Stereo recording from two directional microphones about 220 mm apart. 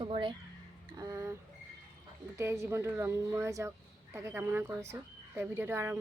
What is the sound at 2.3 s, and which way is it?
Speech, 10° right (ahead or behind).